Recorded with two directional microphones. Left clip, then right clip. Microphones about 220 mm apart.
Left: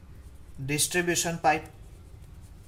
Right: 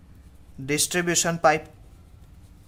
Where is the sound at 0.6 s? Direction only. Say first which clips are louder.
Right 3 dB; 35° right (ahead or behind).